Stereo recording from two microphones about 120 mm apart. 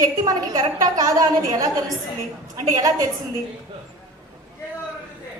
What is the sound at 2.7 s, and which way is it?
Speech, 30° right (ahead or behind).